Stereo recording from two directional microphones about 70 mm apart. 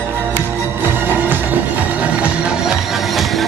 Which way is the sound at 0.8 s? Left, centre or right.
Right.